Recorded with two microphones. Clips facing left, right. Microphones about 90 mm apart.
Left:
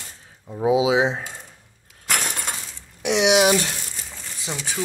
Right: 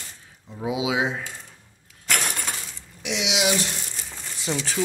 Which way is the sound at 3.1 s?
50° left (ahead or behind).